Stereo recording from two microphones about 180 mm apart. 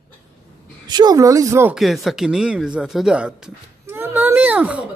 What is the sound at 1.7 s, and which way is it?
Speech, centre (ahead or behind).